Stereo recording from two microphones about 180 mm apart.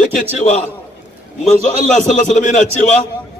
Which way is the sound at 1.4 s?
45° left (ahead or behind).